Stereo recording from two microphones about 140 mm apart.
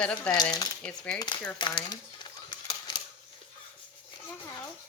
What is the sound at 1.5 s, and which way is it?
Speech, 35° left (ahead or behind).